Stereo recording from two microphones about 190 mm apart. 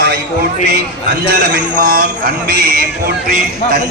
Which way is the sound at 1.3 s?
55° right (ahead or behind).